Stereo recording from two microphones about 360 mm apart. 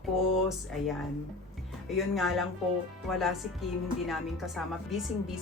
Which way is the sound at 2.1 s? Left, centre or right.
Centre.